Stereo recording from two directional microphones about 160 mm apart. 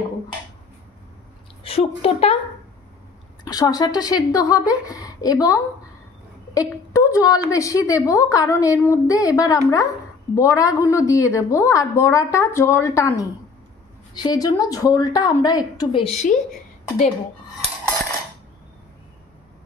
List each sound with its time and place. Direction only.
1.6 s a woman's voice: 40° left (ahead or behind)
3.4 s a woman's voice: 25° left (ahead or behind); by 16.3 s 45° left (ahead or behind)